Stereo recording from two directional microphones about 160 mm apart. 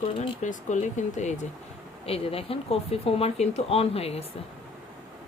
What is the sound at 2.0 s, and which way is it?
Speech, 35° left (ahead or behind).